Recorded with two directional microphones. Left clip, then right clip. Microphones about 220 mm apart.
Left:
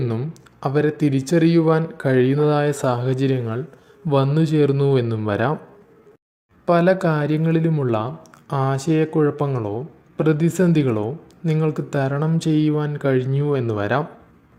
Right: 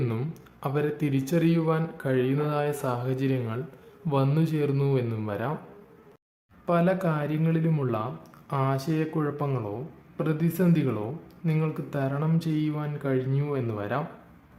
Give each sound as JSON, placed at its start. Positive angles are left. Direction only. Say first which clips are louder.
{"t": 0.0, "sound": "speech", "louder": "left 6 dB", "side_deg": 15}
{"t": 6.7, "sound": "speech", "louder": "left 8 dB", "side_deg": 25}